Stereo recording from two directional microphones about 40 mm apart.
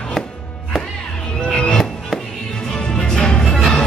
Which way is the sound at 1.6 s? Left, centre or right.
Left.